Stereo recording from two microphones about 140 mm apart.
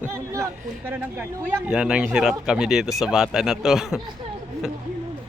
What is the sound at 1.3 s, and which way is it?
Speech, 10° right (ahead or behind).